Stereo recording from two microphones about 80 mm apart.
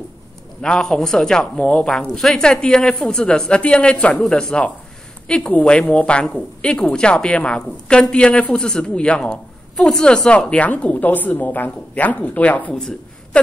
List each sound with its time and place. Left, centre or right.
0.6 s a woman's voice: centre